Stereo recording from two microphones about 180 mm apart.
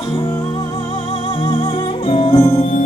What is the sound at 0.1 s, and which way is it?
Music, 20° left (ahead or behind).